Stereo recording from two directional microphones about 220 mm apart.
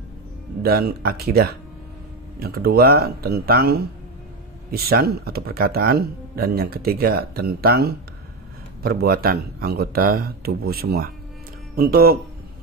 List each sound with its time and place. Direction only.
0.6 s speech: 45° right (ahead or behind)